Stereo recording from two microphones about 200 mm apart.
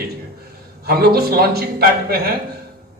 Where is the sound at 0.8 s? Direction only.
50° right (ahead or behind).